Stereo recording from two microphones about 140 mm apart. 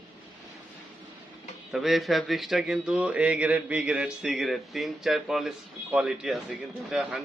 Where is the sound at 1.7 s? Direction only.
Centre (ahead or behind).